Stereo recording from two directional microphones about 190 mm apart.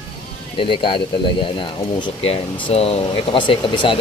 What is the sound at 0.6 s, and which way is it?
Speech, 25° left (ahead or behind).